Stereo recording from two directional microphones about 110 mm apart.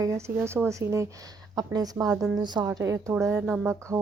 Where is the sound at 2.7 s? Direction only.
30° right (ahead or behind).